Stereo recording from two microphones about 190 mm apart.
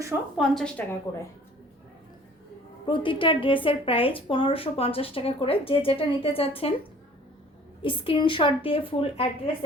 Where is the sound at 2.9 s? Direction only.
25° left (ahead or behind).